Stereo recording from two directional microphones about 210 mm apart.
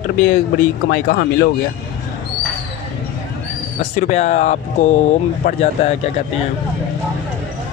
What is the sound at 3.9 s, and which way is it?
Speech, 35° left (ahead or behind).